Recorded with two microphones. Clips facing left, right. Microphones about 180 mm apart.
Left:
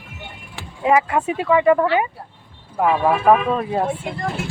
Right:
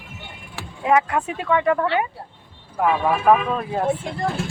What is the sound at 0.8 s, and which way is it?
Speech, 5° left (ahead or behind).